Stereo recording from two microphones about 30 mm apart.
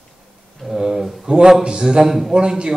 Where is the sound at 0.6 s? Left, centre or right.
Centre.